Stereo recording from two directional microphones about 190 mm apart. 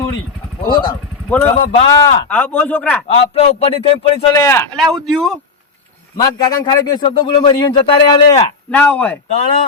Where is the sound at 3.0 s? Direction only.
35° left (ahead or behind).